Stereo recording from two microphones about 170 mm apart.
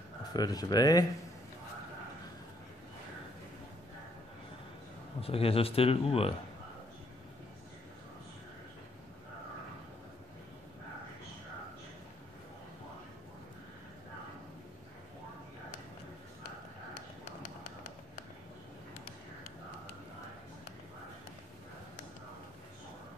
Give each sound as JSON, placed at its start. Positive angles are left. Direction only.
{"t": 0.3, "sound": "speech", "side_deg": 25}
{"t": 5.2, "sound": "speech", "side_deg": 35}